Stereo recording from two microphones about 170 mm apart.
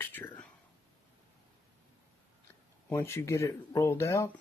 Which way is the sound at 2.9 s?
15° left (ahead or behind).